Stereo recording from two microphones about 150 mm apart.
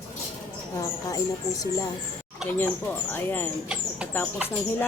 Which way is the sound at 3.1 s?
15° left (ahead or behind).